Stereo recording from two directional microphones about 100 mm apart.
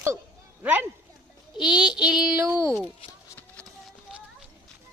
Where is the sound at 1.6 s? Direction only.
5° right (ahead or behind).